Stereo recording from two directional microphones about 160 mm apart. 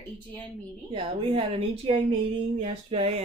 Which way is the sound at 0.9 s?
35° right (ahead or behind).